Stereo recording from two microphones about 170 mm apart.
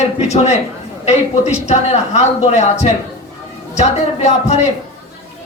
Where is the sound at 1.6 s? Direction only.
40° left (ahead or behind).